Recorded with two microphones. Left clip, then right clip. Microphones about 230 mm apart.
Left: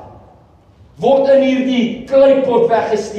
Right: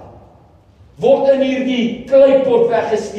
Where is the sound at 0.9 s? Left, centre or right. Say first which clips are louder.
Left 1 dB; left.